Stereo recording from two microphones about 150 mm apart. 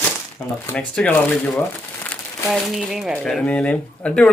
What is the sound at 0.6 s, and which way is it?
Speech, 10° left (ahead or behind).